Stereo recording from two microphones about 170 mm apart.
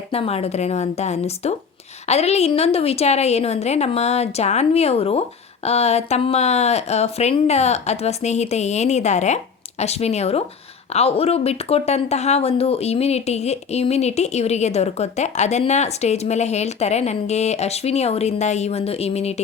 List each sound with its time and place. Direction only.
0.1 s speech: 35° left (ahead or behind)